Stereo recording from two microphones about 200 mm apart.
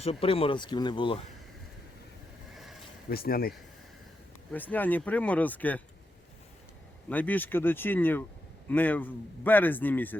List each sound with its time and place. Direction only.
0.0 s speech: 30° left (ahead or behind)
3.1 s speech: 50° left (ahead or behind)
4.5 s speech: 10° left (ahead or behind)
7.1 s speech: 10° left (ahead or behind)